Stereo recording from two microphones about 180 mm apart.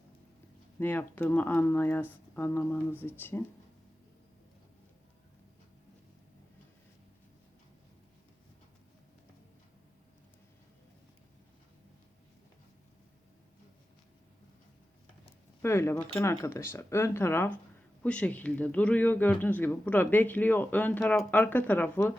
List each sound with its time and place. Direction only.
0.8 s speech: 10° left (ahead or behind)
15.6 s speech: 15° left (ahead or behind)